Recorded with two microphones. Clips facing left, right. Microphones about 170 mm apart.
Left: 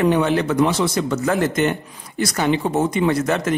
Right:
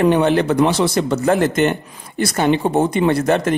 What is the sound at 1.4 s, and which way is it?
Speech, 70° right (ahead or behind).